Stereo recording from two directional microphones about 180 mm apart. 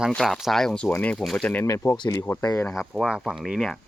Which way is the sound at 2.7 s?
Centre (ahead or behind).